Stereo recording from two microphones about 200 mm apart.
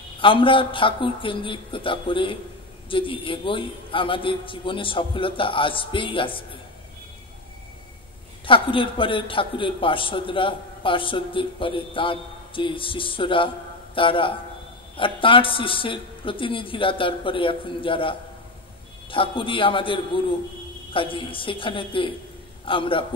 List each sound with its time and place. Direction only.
0.2 s a man's voice: 25° left (ahead or behind)
8.5 s a man's voice: 25° left (ahead or behind)